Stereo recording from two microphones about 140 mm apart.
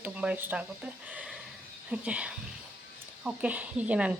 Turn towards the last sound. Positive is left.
turn(degrees=-10)  # may be behind; listen again after turning